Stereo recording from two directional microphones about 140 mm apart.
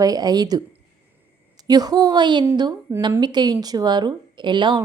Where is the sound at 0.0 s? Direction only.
30° right (ahead or behind).